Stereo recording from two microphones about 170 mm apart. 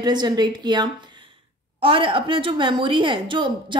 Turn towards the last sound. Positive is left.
turn(degrees=-30)  # may be behind; listen again after turning